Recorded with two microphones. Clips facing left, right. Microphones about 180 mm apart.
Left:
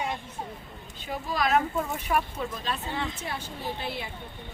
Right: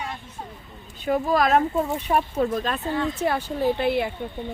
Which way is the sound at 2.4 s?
50° right (ahead or behind).